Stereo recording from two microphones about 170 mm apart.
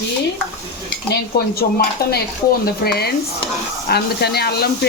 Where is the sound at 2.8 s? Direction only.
65° left (ahead or behind).